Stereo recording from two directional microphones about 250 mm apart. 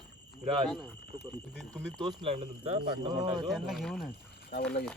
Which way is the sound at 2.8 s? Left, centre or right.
Right.